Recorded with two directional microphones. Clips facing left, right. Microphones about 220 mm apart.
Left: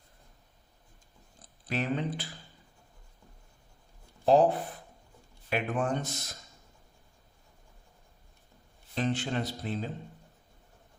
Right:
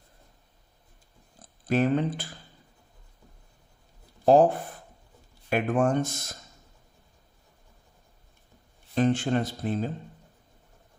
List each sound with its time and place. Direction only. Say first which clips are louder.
1.6 s speech: right 7 dB; 50° right (ahead or behind)
4.3 s speech: right 4 dB; 50° right (ahead or behind)
9.0 s speech: right 7 dB; 50° right (ahead or behind)